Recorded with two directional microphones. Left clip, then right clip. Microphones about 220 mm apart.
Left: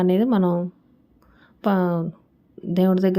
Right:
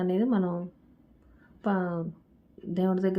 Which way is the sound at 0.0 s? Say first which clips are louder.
Left 8 dB; 40° left (ahead or behind).